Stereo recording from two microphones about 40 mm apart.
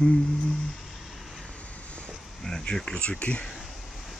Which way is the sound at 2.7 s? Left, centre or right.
Left.